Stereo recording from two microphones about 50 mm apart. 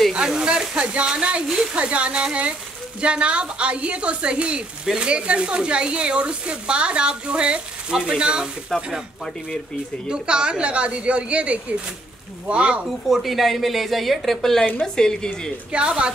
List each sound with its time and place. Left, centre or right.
0.1 s speech: centre
8.7 s a woman's voice: centre
10.0 s speech: centre
12.8 s a woman's voice: centre
15.7 s speech: right